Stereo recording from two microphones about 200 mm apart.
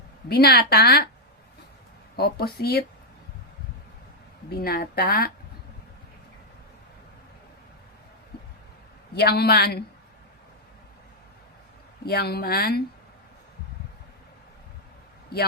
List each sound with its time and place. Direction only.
0.3 s speech: 50° left (ahead or behind)
2.1 s speech: 50° left (ahead or behind)
4.4 s speech: 50° left (ahead or behind)
9.1 s speech: 55° left (ahead or behind)
12.0 s speech: 50° left (ahead or behind)